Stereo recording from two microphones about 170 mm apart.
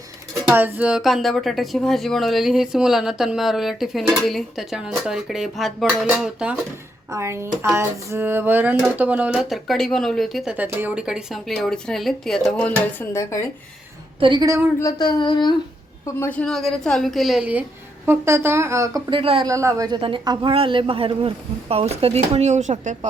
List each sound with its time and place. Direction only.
0.5 s speech: 10° right (ahead or behind)
7.1 s speech: 15° right (ahead or behind); by 13.5 s 15° left (ahead or behind)
14.2 s a man's voice: 30° right (ahead or behind)
14.8 s speech: 20° left (ahead or behind)
16.2 s speech: 10° left (ahead or behind); by 19.0 s 15° right (ahead or behind)
19.1 s speech: 30° right (ahead or behind)
19.5 s a man's voice: 20° right (ahead or behind)
20.0 s speech: 30° right (ahead or behind)